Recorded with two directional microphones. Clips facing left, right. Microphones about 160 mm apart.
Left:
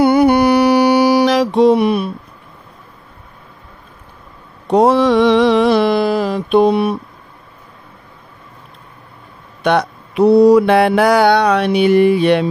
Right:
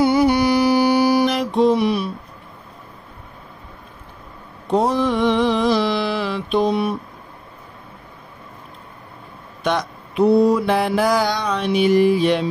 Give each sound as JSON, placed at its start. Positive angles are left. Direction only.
{"t": 0.0, "sound": "mantra", "side_deg": 60}
{"t": 4.6, "sound": "mantra", "side_deg": 75}
{"t": 6.5, "sound": "mantra", "side_deg": 65}
{"t": 9.6, "sound": "mantra", "side_deg": 65}